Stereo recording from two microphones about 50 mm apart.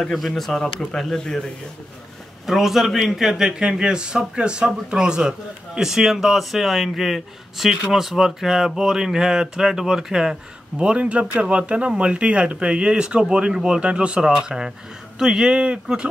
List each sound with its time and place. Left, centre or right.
0.0 s speech: centre
2.4 s a man's voice: centre
10.8 s a man's voice: right